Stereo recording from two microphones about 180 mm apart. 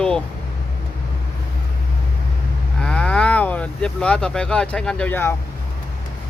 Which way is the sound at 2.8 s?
5° left (ahead or behind).